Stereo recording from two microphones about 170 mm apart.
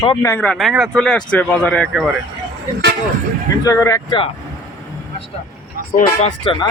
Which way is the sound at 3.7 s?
20° left (ahead or behind).